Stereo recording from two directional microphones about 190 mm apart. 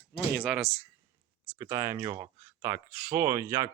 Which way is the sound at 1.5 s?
15° right (ahead or behind).